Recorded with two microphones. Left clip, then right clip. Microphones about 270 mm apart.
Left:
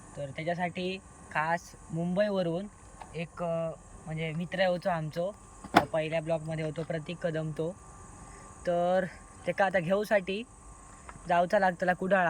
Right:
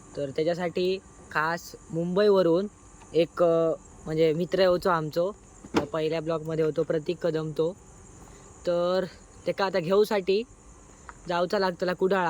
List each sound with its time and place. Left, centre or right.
0.2 s speech: centre
3.2 s speech: right; by 7.7 s centre
8.7 s speech: centre